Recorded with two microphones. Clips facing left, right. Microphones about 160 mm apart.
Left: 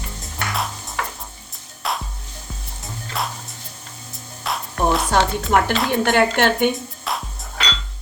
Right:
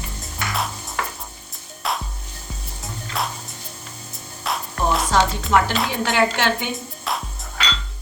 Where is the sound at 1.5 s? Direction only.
Centre (ahead or behind).